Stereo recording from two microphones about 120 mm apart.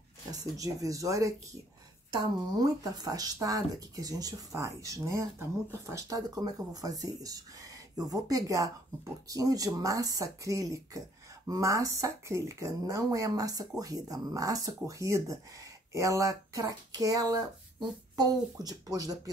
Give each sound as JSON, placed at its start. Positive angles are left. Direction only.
{"t": 0.3, "sound": "speech", "side_deg": -30}